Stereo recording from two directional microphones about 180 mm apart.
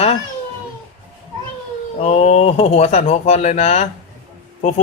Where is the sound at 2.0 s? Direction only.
35° left (ahead or behind).